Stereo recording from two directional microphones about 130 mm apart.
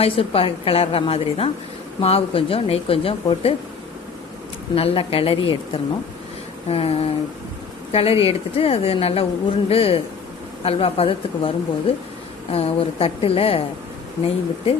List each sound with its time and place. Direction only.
0.0 s a woman's voice: 45° left (ahead or behind)
4.7 s a woman's voice: 45° left (ahead or behind)